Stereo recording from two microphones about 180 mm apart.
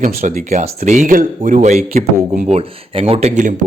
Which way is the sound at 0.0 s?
50° right (ahead or behind).